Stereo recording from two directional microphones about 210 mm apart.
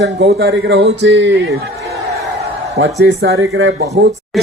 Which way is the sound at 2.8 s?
55° right (ahead or behind).